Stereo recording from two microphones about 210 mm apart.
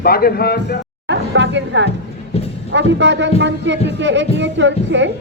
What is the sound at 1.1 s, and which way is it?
Speech, 55° right (ahead or behind).